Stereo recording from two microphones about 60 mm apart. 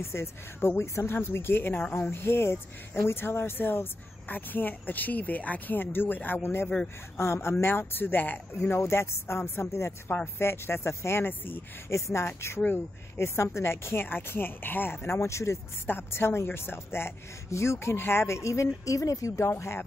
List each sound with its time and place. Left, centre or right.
0.0 s speech: left
8.5 s speech: left
11.9 s speech: left
15.9 s speech: left